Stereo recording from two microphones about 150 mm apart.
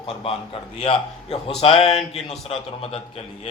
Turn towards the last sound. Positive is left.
turn(degrees=40)  # may be behind; listen again after turning